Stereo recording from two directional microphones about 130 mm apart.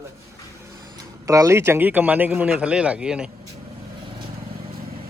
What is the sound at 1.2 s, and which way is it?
Speech, 25° right (ahead or behind).